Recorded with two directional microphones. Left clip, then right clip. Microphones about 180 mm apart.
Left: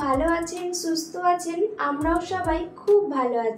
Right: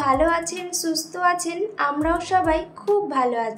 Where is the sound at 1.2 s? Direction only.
55° right (ahead or behind).